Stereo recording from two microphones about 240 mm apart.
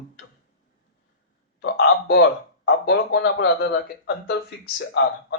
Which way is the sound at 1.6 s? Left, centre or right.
Left.